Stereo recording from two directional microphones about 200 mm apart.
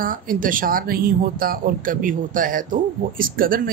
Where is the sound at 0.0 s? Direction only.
45° right (ahead or behind).